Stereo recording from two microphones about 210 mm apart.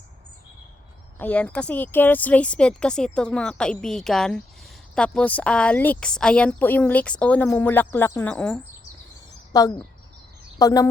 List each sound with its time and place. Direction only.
1.2 s a woman's voice: 5° left (ahead or behind)
9.5 s speech: 15° left (ahead or behind)